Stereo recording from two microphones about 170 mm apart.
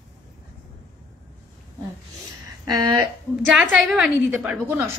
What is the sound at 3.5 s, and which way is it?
A woman's voice, centre (ahead or behind).